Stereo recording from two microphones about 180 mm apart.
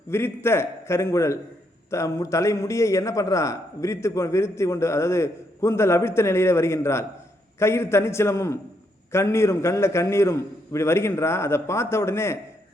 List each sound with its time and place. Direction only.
0.1 s a man's voice: 15° left (ahead or behind)